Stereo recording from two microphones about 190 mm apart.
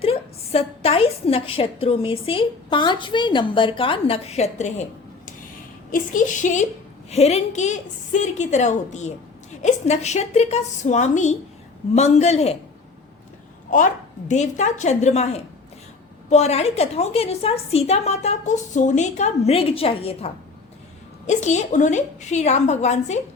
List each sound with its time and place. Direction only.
0.0 s a woman's voice: 30° left (ahead or behind)
13.7 s a woman's voice: 40° left (ahead or behind)